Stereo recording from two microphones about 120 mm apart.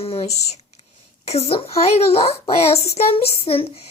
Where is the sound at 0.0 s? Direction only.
55° left (ahead or behind).